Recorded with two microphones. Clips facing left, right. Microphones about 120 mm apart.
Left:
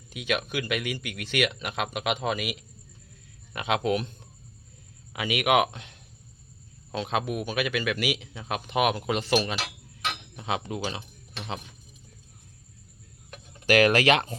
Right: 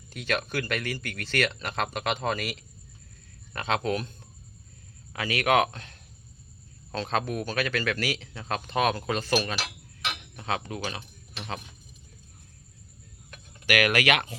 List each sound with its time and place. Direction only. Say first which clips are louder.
0.1 s speech: left 1 dB; 10° left (ahead or behind)
5.1 s speech: even; 15° left (ahead or behind)
13.7 s speech: left 4 dB; 35° left (ahead or behind)